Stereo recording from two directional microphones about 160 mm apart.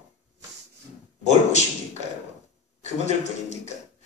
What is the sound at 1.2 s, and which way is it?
Speech, 45° left (ahead or behind).